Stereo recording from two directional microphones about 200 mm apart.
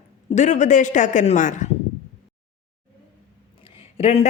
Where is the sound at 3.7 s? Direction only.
30° left (ahead or behind).